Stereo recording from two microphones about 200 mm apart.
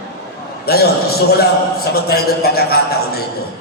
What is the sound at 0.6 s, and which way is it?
A man's voice, 50° left (ahead or behind).